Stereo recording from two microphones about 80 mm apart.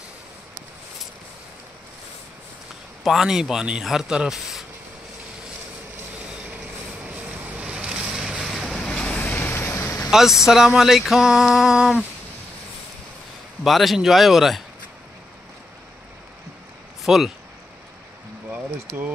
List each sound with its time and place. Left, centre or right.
3.0 s speech: centre
6.4 s vehicle: centre
8.7 s vehicle: centre; by 9.9 s left
10.1 s a sound: centre
13.7 s a sound: centre
17.0 s speech: centre